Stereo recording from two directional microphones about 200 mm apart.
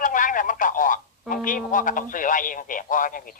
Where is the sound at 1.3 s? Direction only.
40° left (ahead or behind).